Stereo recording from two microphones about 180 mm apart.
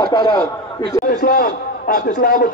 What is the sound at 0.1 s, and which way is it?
Speech, 25° left (ahead or behind).